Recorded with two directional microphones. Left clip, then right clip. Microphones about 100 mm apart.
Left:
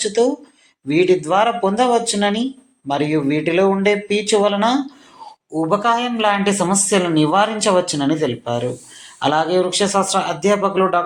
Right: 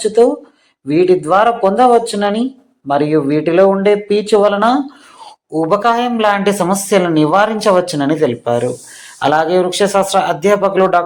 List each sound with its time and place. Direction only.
0.0 s a woman's voice: 35° right (ahead or behind)